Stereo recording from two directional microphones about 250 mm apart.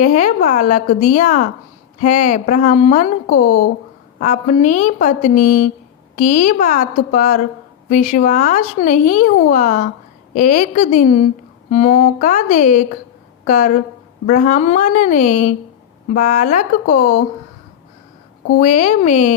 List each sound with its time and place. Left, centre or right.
0.0 s a woman's voice: left
18.6 s speech: left